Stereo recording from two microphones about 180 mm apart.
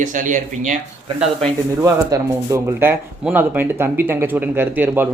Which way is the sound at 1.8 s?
15° right (ahead or behind).